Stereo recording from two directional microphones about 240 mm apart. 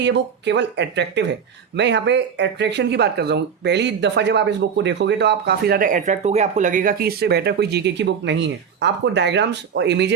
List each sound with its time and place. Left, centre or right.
0.0 s speech: right